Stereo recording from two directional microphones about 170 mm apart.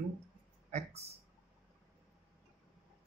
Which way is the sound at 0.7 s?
40° right (ahead or behind).